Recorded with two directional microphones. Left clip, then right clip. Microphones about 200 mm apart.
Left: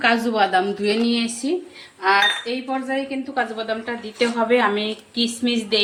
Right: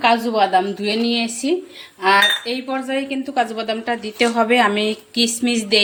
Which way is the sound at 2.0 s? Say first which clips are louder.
Right 3 dB; 35° right (ahead or behind).